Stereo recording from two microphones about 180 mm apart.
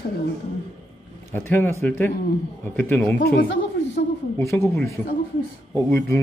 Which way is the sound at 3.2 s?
60° left (ahead or behind).